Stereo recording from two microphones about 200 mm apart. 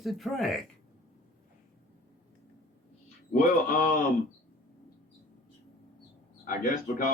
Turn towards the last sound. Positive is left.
turn(degrees=45)  # may be behind; listen again after turning